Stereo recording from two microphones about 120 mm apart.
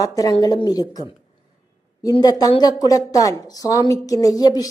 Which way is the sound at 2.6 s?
35° left (ahead or behind).